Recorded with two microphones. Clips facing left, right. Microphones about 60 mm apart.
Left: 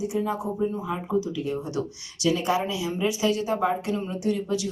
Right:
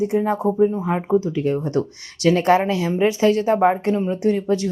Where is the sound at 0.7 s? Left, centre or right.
Right.